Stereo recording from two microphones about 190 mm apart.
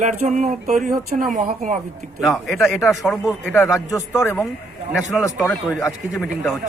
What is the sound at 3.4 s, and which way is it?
A man's voice, 10° left (ahead or behind).